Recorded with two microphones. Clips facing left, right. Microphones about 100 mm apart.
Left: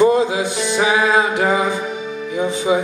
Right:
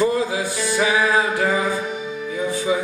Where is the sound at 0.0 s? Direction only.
20° left (ahead or behind).